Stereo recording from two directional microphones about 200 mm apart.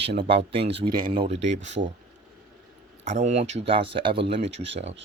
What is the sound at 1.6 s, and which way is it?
Speech, 60° right (ahead or behind).